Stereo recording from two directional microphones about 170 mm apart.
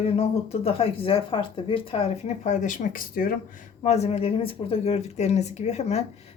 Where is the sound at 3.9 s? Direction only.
40° left (ahead or behind).